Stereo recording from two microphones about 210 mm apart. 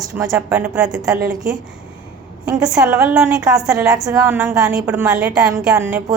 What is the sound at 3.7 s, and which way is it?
A woman's voice, 15° right (ahead or behind).